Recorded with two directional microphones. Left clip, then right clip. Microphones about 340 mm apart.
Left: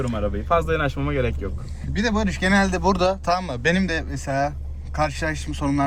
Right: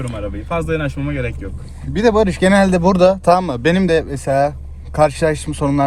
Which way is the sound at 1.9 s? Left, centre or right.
Centre.